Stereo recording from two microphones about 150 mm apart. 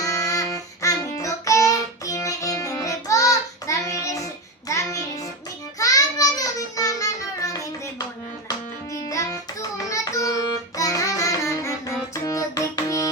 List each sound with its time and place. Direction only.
0.0 s child singing: 20° left (ahead or behind)
5.8 s music: 25° left (ahead or behind)